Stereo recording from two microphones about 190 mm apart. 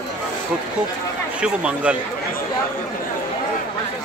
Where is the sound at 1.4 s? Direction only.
5° right (ahead or behind).